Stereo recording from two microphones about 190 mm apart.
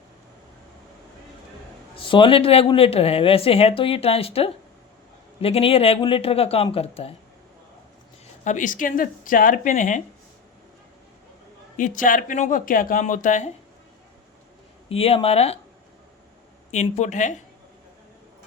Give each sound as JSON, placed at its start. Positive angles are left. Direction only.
{"t": 2.0, "sound": "speech", "side_deg": 25}
{"t": 8.4, "sound": "speech", "side_deg": 40}
{"t": 11.8, "sound": "speech", "side_deg": 45}
{"t": 14.8, "sound": "speech", "side_deg": 30}
{"t": 16.7, "sound": "speech", "side_deg": 35}